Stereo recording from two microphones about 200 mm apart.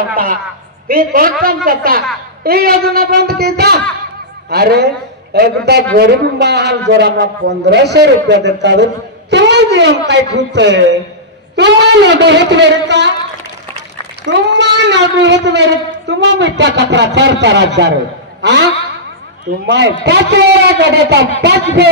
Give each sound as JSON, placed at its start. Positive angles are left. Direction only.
{"t": 0.1, "sound": "a woman's voice", "side_deg": -45}
{"t": 14.3, "sound": "a man's voice", "side_deg": -65}
{"t": 19.6, "sound": "a man's voice", "side_deg": -60}